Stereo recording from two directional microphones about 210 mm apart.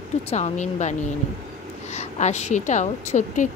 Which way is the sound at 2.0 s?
35° left (ahead or behind).